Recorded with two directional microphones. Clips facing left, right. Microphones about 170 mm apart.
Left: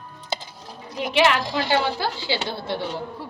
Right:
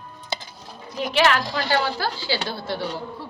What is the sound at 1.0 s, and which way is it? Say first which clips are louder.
A woman's voice: even; 20° left (ahead or behind).